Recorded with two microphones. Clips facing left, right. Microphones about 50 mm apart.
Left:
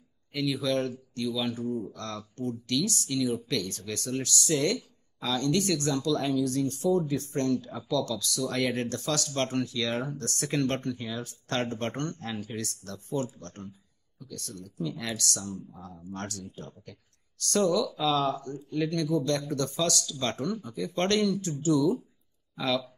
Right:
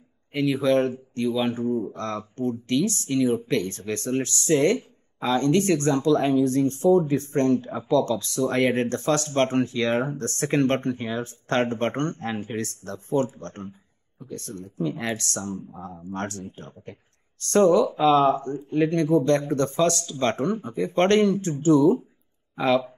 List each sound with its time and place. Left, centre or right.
0.3 s speech: right